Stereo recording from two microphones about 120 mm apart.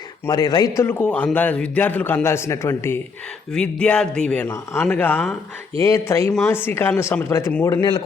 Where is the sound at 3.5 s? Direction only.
10° left (ahead or behind).